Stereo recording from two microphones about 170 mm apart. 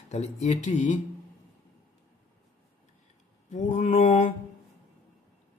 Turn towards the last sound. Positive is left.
turn(degrees=40)  # may be behind; listen again after turning